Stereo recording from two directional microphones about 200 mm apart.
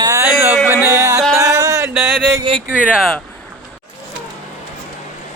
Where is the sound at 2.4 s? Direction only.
25° right (ahead or behind).